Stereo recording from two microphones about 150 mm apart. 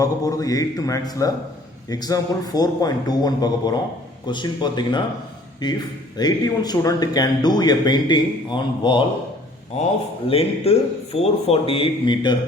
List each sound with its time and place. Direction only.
0.0 s a man's voice: 20° left (ahead or behind)
6.1 s speech: 25° left (ahead or behind)
10.2 s a man's voice: 40° left (ahead or behind)